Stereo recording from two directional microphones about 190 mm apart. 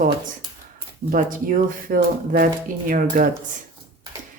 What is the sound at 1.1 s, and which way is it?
Speech, 45° right (ahead or behind).